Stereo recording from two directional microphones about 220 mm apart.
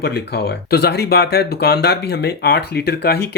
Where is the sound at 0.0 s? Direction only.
50° left (ahead or behind).